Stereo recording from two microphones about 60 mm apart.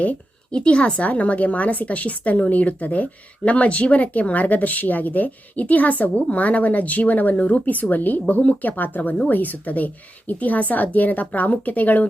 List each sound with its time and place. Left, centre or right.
0.5 s a woman's voice: centre